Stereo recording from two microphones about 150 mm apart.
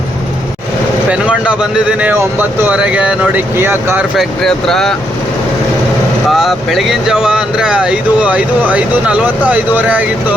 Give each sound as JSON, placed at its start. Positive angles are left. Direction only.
{"t": 1.1, "sound": "vehicle", "side_deg": -5}
{"t": 2.0, "sound": "speech", "side_deg": -10}
{"t": 4.2, "sound": "speech", "side_deg": 5}
{"t": 6.3, "sound": "speech", "side_deg": 0}